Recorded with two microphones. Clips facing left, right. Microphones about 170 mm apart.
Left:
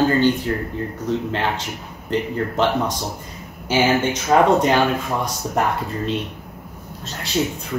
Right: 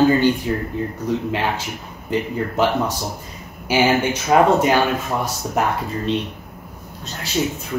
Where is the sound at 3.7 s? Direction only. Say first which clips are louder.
Right 1 dB; 10° right (ahead or behind).